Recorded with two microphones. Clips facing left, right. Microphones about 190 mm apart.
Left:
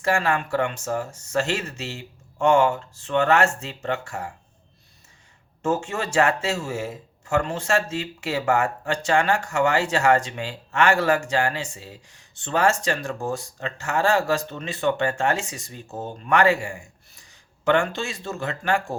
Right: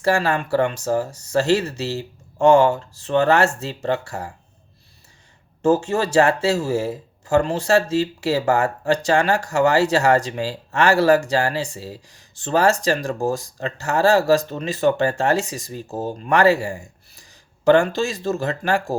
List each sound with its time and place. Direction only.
0.0 s speech: 35° right (ahead or behind)
5.6 s speech: 35° right (ahead or behind)